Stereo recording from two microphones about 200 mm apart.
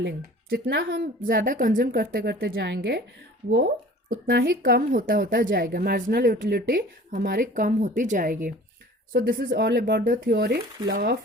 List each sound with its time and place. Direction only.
0.0 s a woman's voice: 55° right (ahead or behind)
4.1 s a woman's voice: 50° right (ahead or behind)